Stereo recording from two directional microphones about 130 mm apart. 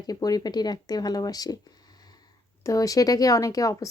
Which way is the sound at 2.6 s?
25° left (ahead or behind).